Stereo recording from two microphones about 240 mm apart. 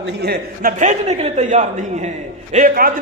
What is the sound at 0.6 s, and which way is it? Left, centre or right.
A man's voice, right.